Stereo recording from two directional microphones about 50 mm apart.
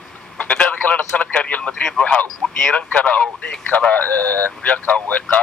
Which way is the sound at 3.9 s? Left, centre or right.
Left.